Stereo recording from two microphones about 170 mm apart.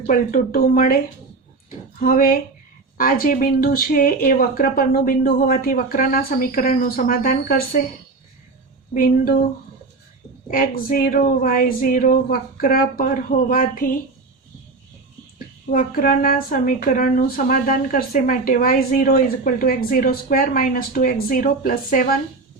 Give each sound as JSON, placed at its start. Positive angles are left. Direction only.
{"t": 0.1, "sound": "speech", "side_deg": 50}
{"t": 2.0, "sound": "a woman's voice", "side_deg": 60}
{"t": 8.9, "sound": "a woman's voice", "side_deg": 55}
{"t": 10.5, "sound": "a woman's voice", "side_deg": 55}
{"t": 15.7, "sound": "a woman's voice", "side_deg": 55}